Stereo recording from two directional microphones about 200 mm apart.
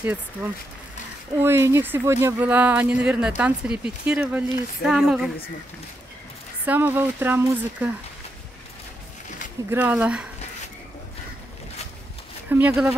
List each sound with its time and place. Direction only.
0.0 s speech: 10° right (ahead or behind)
6.6 s speech: 10° right (ahead or behind)
9.7 s speech: 10° right (ahead or behind)
12.4 s speech: 10° right (ahead or behind)